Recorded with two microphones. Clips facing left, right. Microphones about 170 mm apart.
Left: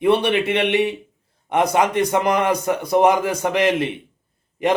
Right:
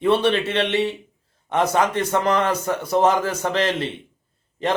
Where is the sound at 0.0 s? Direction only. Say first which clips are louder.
Left 1 dB; 15° left (ahead or behind).